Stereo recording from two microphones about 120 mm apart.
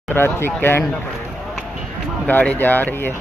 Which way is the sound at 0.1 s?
20° left (ahead or behind).